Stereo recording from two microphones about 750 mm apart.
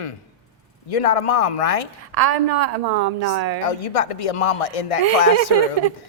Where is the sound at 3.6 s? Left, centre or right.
Left.